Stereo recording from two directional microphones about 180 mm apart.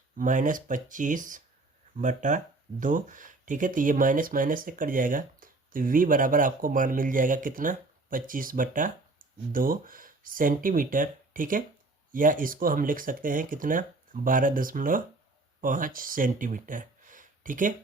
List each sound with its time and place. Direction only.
0.2 s speech: 45° right (ahead or behind)